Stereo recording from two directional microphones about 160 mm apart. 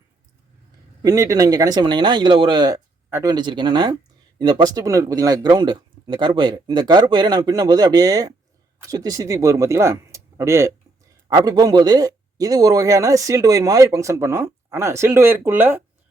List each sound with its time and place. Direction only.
1.0 s speech: 20° right (ahead or behind)
3.3 s speech: 30° right (ahead or behind); by 15.8 s 15° right (ahead or behind)